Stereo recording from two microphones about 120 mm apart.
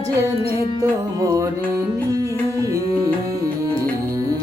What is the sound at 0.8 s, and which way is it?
Music, 25° right (ahead or behind).